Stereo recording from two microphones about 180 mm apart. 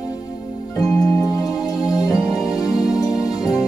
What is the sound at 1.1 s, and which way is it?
Music, centre (ahead or behind).